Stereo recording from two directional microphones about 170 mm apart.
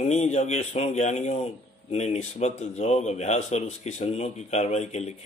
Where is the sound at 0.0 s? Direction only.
40° left (ahead or behind).